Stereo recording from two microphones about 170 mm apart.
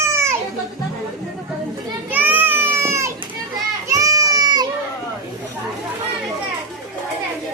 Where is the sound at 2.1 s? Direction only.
10° right (ahead or behind).